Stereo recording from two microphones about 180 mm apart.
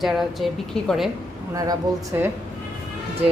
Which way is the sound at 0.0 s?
Centre (ahead or behind).